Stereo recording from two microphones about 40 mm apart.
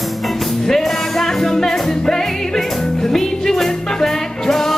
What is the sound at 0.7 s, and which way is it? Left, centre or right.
Music, centre.